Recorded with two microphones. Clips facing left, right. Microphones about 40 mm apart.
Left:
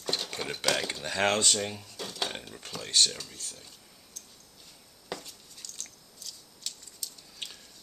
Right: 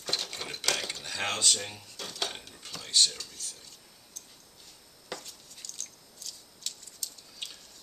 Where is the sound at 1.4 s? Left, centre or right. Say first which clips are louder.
Left 1 dB; centre.